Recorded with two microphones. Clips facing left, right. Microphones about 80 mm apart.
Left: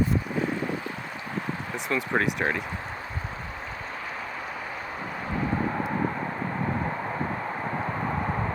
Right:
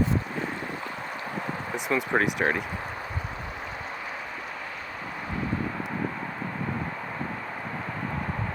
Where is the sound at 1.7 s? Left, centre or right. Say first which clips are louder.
Right 1 dB; centre.